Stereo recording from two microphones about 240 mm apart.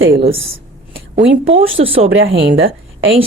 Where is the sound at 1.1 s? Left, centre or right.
Right.